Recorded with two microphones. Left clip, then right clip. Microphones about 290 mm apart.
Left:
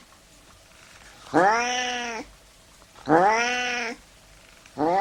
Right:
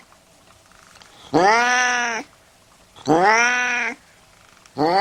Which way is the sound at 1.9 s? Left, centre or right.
Right.